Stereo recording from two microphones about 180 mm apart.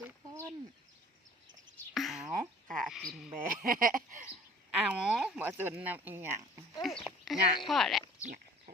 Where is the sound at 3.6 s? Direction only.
50° right (ahead or behind).